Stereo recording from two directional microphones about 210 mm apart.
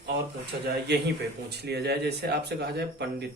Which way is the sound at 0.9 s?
50° right (ahead or behind).